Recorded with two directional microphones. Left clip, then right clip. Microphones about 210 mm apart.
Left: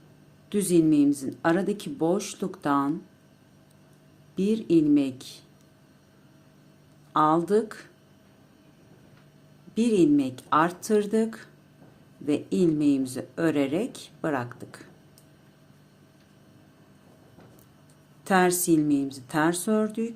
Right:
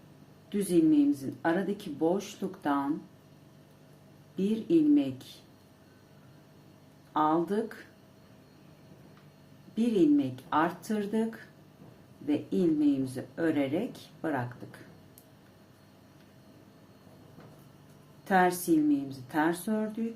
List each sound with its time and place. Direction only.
0.5 s speech: 45° left (ahead or behind)
4.4 s speech: 40° left (ahead or behind)
7.1 s speech: 45° left (ahead or behind)
9.7 s speech: 45° left (ahead or behind)
18.3 s speech: 45° left (ahead or behind)